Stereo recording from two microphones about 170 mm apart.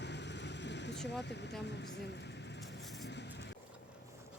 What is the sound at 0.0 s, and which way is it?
Vehicle, 90° left.